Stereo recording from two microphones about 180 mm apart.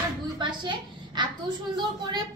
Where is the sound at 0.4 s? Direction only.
25° right (ahead or behind).